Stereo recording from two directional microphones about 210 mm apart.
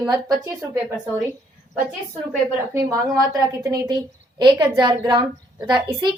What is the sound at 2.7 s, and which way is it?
A woman's voice, 15° right (ahead or behind).